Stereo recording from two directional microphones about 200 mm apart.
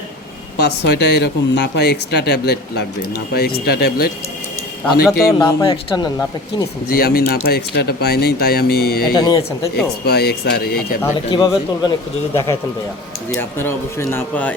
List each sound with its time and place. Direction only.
0.6 s speech: 55° left (ahead or behind)
5.4 s speech: 20° left (ahead or behind)
6.9 s speech: 50° left (ahead or behind)
9.1 s speech: 20° left (ahead or behind)
9.7 s speech: 50° left (ahead or behind)
11.3 s speech: 20° left (ahead or behind)